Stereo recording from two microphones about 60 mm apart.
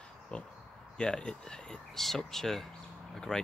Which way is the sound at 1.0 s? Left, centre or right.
Centre.